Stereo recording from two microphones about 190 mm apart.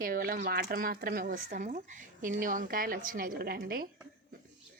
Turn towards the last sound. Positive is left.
turn(degrees=-50)  # may be behind; listen again after turning